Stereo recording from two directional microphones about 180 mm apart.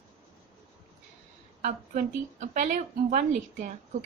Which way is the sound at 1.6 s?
45° right (ahead or behind).